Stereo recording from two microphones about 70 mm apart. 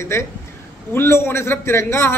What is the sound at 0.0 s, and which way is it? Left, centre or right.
A man's voice, left.